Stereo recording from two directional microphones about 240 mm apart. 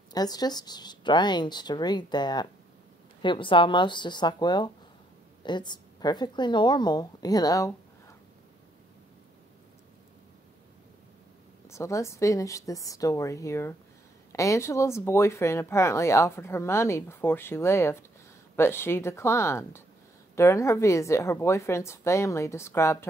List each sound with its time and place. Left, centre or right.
0.1 s speech: centre
11.7 s speech: centre